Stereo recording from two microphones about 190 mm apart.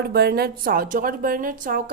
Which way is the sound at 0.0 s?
55° right (ahead or behind).